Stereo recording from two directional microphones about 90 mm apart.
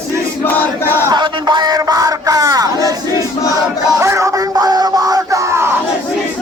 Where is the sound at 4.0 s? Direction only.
35° right (ahead or behind).